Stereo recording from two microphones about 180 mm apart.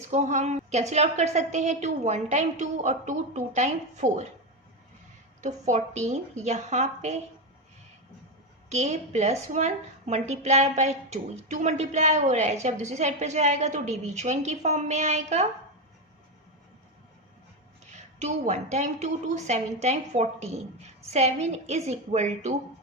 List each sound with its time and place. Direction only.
0.1 s a woman's voice: 40° right (ahead or behind)
5.4 s a woman's voice: 40° right (ahead or behind)
8.7 s a woman's voice: 40° right (ahead or behind)
17.9 s a woman's voice: 40° right (ahead or behind)